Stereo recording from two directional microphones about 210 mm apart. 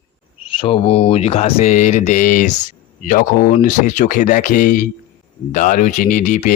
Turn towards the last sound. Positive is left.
turn(degrees=40)  # may be behind; listen again after turning